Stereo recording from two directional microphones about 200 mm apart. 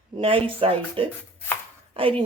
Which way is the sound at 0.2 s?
25° right (ahead or behind).